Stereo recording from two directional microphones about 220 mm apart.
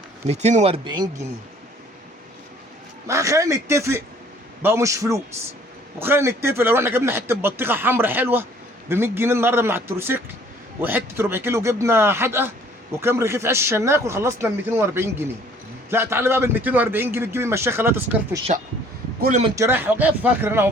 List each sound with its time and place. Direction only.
0.3 s speech: 30° right (ahead or behind)
3.1 s speech: 15° right (ahead or behind)
18.5 s speech: 35° right (ahead or behind)
19.5 s speech: 10° right (ahead or behind)